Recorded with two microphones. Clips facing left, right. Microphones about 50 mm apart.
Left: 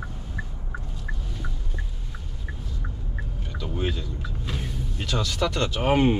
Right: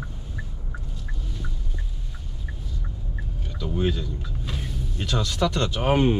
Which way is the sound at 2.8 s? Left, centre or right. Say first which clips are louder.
Left 1 dB; centre.